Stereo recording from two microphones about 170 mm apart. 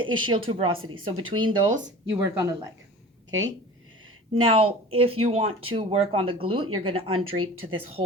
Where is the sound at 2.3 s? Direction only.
20° right (ahead or behind).